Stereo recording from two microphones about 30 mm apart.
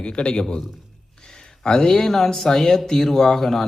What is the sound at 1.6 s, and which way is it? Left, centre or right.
Speech, left.